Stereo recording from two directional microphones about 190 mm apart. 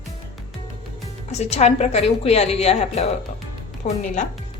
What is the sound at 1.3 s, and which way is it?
A woman's voice, 35° left (ahead or behind).